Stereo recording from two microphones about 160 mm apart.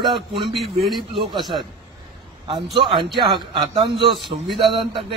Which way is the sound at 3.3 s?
25° right (ahead or behind).